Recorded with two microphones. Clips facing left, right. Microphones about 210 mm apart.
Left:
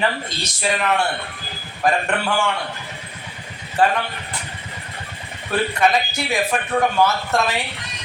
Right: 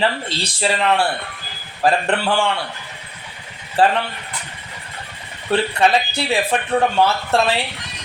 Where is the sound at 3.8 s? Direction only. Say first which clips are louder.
Right 2 dB; 35° right (ahead or behind).